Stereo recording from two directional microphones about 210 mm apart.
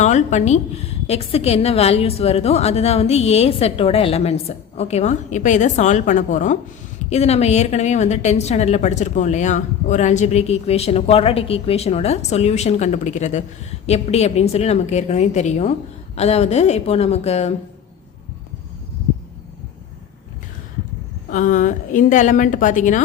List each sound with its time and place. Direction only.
0.0 s a woman's voice: 35° left (ahead or behind)
21.2 s a woman's voice: 40° left (ahead or behind)